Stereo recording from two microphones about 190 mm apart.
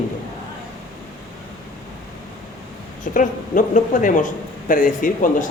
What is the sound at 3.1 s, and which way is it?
Speech, 45° left (ahead or behind).